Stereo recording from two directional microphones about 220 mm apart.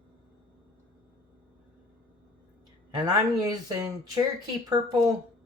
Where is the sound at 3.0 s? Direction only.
15° right (ahead or behind).